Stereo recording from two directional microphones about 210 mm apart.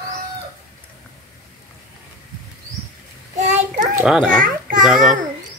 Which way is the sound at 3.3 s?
35° right (ahead or behind).